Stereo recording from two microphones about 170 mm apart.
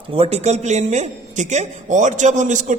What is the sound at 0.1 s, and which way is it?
A man's voice, 35° right (ahead or behind).